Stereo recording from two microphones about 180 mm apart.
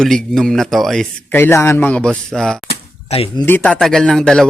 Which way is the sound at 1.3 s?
15° left (ahead or behind).